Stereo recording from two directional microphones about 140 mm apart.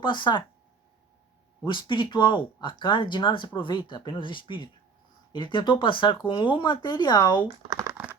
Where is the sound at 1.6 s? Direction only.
35° left (ahead or behind).